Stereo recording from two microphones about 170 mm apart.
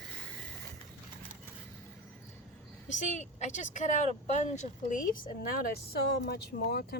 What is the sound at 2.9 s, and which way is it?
Speech, 45° left (ahead or behind).